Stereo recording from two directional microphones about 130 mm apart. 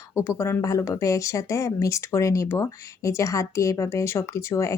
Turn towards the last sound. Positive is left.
turn(degrees=20)  # may be behind; listen again after turning